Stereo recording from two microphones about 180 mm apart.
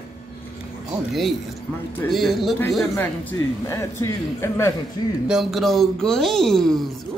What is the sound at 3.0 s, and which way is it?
A man's voice, 15° left (ahead or behind).